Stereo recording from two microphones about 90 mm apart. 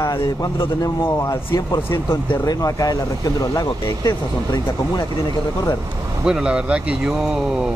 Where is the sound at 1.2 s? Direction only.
40° left (ahead or behind).